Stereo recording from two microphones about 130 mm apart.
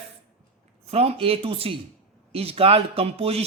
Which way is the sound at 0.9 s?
50° right (ahead or behind).